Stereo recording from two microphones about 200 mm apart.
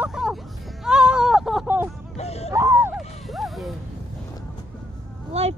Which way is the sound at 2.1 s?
30° left (ahead or behind).